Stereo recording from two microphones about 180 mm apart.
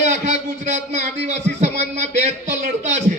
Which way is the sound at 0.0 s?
40° right (ahead or behind).